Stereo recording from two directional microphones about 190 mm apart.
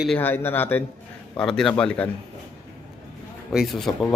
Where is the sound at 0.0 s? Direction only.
5° left (ahead or behind).